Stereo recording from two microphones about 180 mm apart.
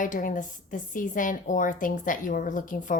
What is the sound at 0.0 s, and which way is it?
Speech, 50° left (ahead or behind).